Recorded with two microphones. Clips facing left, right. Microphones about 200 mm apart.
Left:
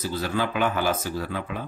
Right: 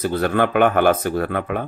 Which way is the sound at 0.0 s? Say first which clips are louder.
Right 8 dB; 60° right (ahead or behind).